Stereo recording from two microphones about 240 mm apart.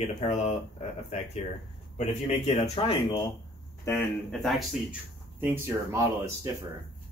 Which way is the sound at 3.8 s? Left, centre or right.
Centre.